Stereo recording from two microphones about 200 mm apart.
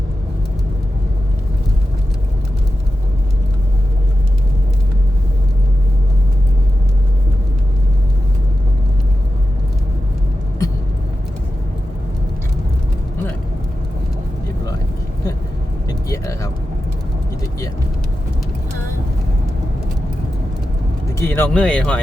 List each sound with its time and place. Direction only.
15.9 s vehicle: 15° left (ahead or behind)
21.2 s speech: 10° left (ahead or behind)